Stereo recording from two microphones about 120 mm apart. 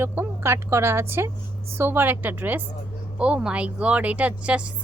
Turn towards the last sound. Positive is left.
turn(degrees=-10)  # may be behind; listen again after turning